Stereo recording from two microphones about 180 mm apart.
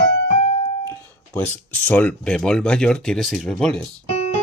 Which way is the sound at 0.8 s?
10° left (ahead or behind).